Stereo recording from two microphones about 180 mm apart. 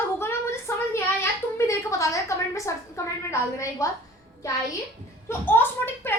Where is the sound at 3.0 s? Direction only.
15° left (ahead or behind).